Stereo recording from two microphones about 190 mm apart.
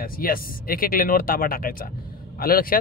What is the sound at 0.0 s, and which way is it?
Speech, 50° left (ahead or behind).